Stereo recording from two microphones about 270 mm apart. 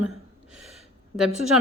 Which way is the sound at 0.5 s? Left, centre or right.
Centre.